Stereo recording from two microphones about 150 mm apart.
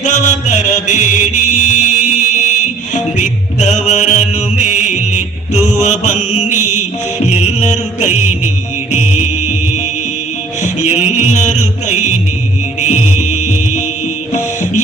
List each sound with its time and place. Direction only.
0.0 s music: 55° left (ahead or behind)
10.8 s music: 50° left (ahead or behind)